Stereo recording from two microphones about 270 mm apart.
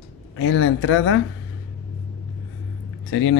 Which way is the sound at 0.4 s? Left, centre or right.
Left.